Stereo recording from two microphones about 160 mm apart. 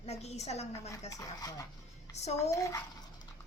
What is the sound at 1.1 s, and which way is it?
Speech, 20° left (ahead or behind).